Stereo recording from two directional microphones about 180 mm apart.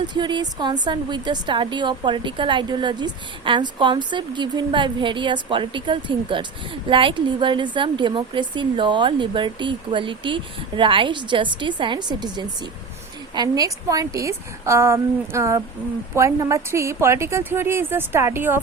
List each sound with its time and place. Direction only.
0.1 s a woman's voice: 25° right (ahead or behind)